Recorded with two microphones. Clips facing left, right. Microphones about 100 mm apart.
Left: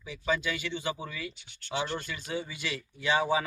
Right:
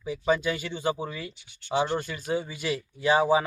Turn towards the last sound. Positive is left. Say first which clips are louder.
# right 5 dB
turn(degrees=-35)  # may be behind; listen again after turning